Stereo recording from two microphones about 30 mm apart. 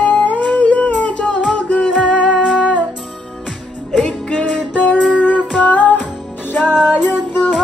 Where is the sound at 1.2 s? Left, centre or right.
Left.